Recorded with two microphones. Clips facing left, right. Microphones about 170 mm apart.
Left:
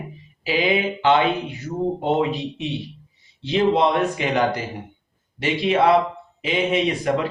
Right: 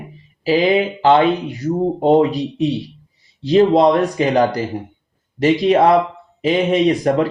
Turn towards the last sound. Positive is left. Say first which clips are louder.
# right 6 dB
turn(degrees=-40)  # may be behind; listen again after turning